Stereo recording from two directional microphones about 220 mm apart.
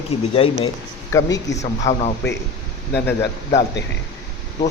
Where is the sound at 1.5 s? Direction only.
55° left (ahead or behind).